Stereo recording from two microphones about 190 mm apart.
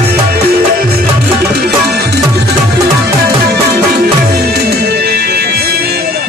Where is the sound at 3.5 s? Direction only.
55° right (ahead or behind).